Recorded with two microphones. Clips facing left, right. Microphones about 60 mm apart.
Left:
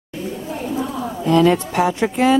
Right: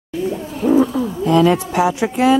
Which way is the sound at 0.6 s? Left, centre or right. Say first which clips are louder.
Right 13 dB; right.